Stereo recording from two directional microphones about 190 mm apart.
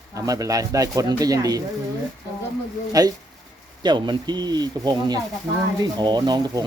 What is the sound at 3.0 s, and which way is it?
Speech, 20° right (ahead or behind).